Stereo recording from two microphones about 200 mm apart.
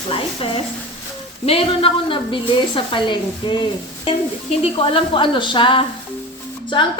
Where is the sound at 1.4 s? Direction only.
30° left (ahead or behind).